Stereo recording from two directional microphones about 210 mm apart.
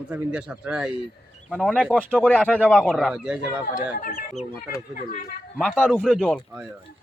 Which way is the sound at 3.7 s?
40° left (ahead or behind).